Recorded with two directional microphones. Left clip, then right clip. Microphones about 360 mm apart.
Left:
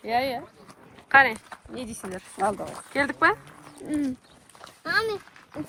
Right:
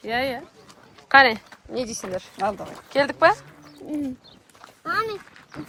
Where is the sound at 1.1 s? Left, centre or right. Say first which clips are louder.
Right 3 dB; centre.